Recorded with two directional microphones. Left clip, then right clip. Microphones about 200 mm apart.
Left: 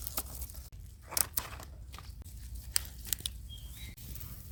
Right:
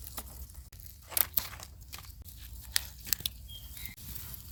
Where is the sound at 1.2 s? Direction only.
5° left (ahead or behind).